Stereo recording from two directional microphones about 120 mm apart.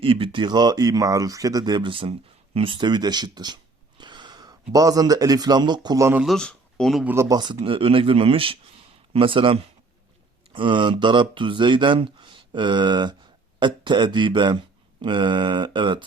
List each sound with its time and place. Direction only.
0.0 s speech: 45° right (ahead or behind)
6.2 s speech: 5° left (ahead or behind)
7.0 s speech: 15° right (ahead or behind)
7.3 s speech: 35° right (ahead or behind)